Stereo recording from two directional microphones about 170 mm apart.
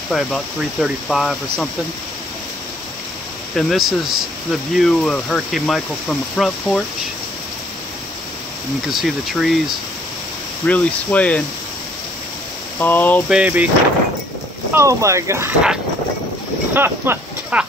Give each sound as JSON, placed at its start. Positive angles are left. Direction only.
{"t": 0.1, "sound": "speech", "side_deg": 0}
{"t": 3.5, "sound": "speech", "side_deg": 0}
{"t": 8.8, "sound": "speech", "side_deg": 0}
{"t": 10.7, "sound": "speech", "side_deg": 10}
{"t": 12.7, "sound": "speech", "side_deg": 10}
{"t": 13.3, "sound": "speech", "side_deg": -10}
{"t": 14.7, "sound": "speech", "side_deg": -15}
{"t": 16.7, "sound": "speech", "side_deg": -15}